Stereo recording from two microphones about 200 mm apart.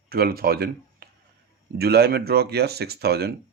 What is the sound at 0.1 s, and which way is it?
Speech, 50° right (ahead or behind).